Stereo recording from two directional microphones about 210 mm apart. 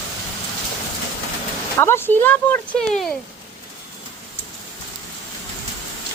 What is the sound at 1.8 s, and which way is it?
Speech, 10° left (ahead or behind).